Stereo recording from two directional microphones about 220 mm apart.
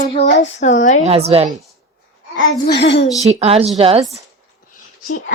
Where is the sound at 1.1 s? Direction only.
25° right (ahead or behind).